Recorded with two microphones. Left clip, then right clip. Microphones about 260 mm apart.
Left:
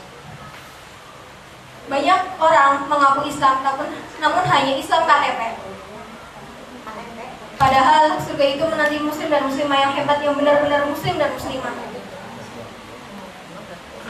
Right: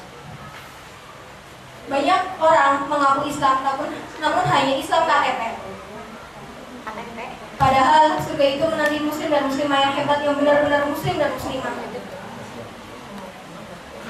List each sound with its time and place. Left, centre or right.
1.9 s a woman's voice: centre
7.7 s a woman's voice: centre
8.5 s a woman's voice: centre
8.9 s a woman's voice: centre